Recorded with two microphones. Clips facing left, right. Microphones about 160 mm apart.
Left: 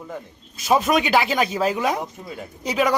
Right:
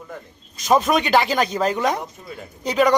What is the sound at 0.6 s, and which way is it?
Speech, 5° left (ahead or behind).